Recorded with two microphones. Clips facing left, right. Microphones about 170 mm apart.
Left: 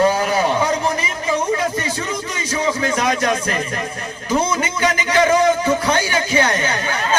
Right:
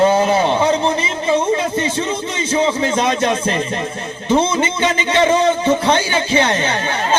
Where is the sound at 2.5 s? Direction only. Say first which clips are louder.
Right 3 dB; 30° right (ahead or behind).